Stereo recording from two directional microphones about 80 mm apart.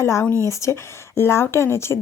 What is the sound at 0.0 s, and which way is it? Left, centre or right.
A woman's voice, left.